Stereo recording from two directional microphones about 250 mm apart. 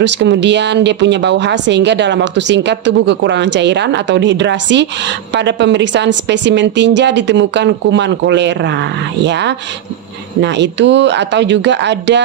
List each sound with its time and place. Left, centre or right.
0.0 s a woman's voice: right